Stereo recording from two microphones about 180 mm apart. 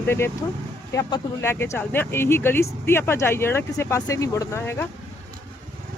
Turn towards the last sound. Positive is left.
turn(degrees=15)  # may be behind; listen again after turning